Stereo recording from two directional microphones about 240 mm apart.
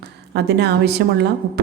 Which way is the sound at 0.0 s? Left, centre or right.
Right.